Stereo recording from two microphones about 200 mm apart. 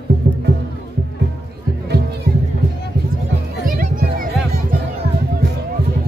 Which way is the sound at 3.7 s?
45° right (ahead or behind).